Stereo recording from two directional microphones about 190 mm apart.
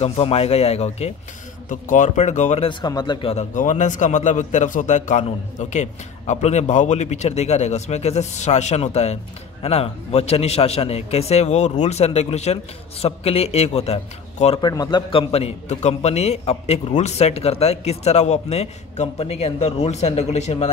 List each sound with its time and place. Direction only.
0.0 s speech: 35° left (ahead or behind)